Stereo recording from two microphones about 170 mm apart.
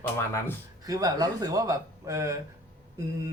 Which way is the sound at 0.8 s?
20° right (ahead or behind).